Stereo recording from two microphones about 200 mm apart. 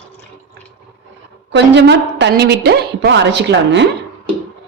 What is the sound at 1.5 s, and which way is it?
A woman's voice, 60° right (ahead or behind).